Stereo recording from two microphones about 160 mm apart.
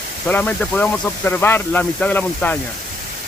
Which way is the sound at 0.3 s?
10° left (ahead or behind).